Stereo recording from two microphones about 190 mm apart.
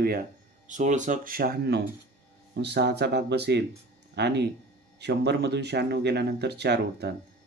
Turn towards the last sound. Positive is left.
turn(degrees=-60)  # may be behind; listen again after turning